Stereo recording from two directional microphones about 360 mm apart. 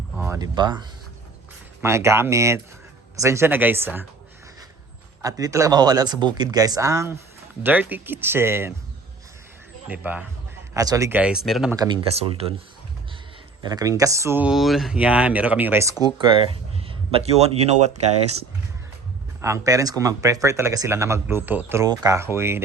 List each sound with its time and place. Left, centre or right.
0.2 s speech: centre
5.2 s speech: centre
9.9 s speech: centre
13.6 s speech: centre
19.4 s speech: centre